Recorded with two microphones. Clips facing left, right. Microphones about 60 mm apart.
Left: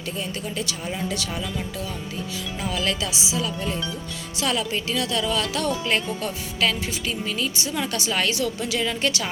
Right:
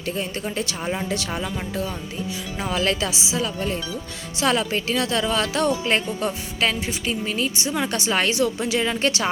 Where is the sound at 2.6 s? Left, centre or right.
Right.